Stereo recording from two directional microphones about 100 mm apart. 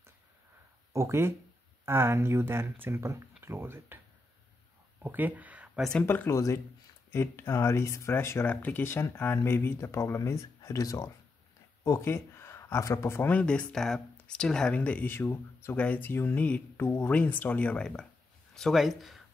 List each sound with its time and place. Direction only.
0.9 s speech: 25° right (ahead or behind)
5.0 s speech: 15° right (ahead or behind)
6.0 s speech: 25° left (ahead or behind)
13.3 s speech: 10° left (ahead or behind)
16.8 s speech: 25° left (ahead or behind)
17.1 s speech: 15° left (ahead or behind); by 19.2 s centre (ahead or behind)